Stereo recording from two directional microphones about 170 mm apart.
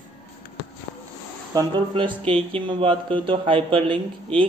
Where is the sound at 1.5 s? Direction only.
25° right (ahead or behind).